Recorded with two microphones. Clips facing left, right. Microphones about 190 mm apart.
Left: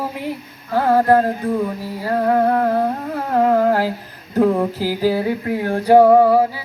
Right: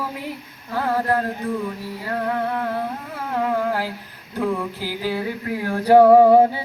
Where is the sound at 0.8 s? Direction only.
35° left (ahead or behind).